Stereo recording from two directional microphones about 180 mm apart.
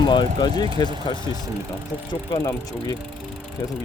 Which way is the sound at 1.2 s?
20° right (ahead or behind).